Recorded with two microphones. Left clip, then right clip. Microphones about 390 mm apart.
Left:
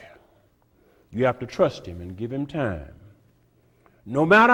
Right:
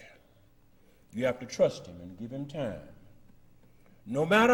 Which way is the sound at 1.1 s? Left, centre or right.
Left.